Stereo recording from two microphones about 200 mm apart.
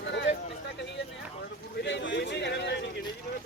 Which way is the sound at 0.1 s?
60° left (ahead or behind).